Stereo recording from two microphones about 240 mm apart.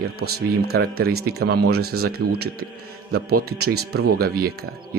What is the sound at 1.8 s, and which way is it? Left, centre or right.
Speech, right.